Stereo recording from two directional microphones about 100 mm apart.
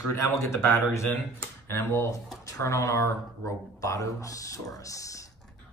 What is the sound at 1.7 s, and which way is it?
Speech, 25° left (ahead or behind).